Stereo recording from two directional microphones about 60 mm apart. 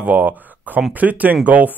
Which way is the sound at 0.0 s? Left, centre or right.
Right.